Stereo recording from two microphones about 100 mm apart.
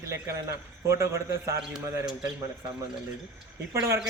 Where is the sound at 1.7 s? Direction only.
5° right (ahead or behind).